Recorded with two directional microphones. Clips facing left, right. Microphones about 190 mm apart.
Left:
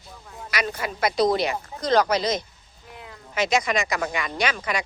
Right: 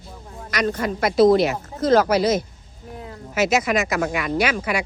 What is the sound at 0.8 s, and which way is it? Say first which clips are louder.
A woman's voice: right 6 dB; centre (ahead or behind).